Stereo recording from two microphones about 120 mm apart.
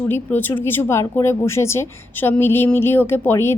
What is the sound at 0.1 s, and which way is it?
Speech, 15° left (ahead or behind).